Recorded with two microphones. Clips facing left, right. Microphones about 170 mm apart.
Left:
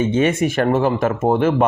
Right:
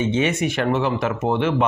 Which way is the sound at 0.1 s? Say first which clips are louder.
Left 4 dB; 50° left (ahead or behind).